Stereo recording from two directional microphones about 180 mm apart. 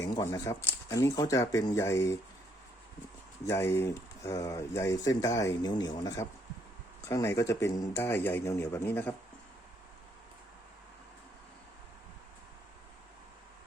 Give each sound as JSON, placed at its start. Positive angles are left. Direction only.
{"t": 0.0, "sound": "speech", "side_deg": 20}
{"t": 3.4, "sound": "speech", "side_deg": 15}